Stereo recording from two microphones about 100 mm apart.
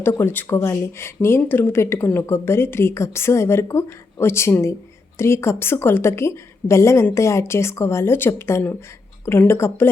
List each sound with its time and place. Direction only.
0.0 s speech: 20° left (ahead or behind)